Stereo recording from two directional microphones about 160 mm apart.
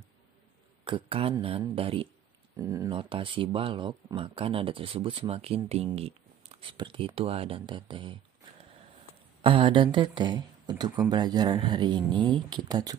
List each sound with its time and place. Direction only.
0.8 s speech: 35° right (ahead or behind)
2.5 s speech: 20° right (ahead or behind)
2.9 s speech: 35° right (ahead or behind)
9.4 s speech: 35° right (ahead or behind)